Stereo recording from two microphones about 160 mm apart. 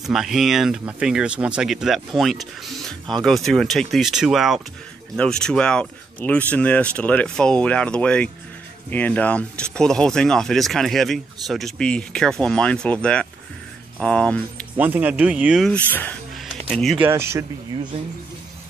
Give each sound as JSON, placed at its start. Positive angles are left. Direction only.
{"t": 0.0, "sound": "speech", "side_deg": 0}
{"t": 14.8, "sound": "speech", "side_deg": -10}
{"t": 15.9, "sound": "speech", "side_deg": 10}
{"t": 17.0, "sound": "speech", "side_deg": -15}